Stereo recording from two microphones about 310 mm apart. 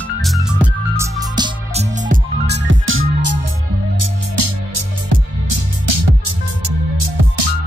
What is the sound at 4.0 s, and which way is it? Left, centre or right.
Music, right.